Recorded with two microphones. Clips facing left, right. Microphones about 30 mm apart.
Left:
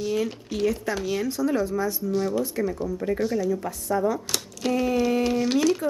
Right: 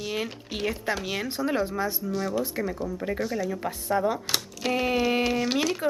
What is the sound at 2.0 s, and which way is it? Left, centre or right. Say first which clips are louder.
Speech: left 3 dB; centre.